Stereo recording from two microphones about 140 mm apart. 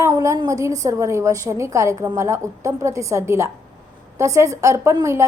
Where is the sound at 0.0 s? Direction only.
20° right (ahead or behind).